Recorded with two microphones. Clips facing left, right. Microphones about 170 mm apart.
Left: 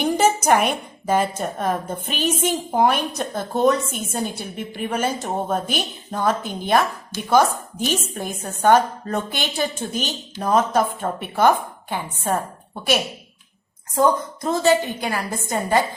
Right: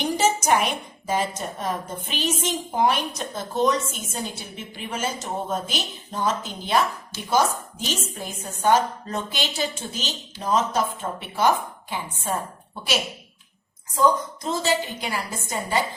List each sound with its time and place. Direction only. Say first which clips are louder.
0.2 s a woman's voice: left 3 dB; 55° left (ahead or behind)
13.9 s a woman's voice: left 2 dB; 55° left (ahead or behind)